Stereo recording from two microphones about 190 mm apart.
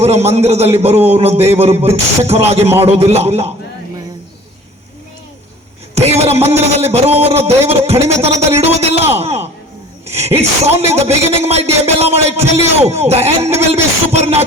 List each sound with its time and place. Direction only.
0.0 s speech: 35° right (ahead or behind)
6.0 s speech: 35° right (ahead or behind)